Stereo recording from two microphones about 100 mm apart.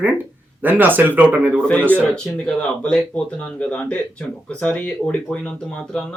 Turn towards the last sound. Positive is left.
turn(degrees=10)  # may be behind; listen again after turning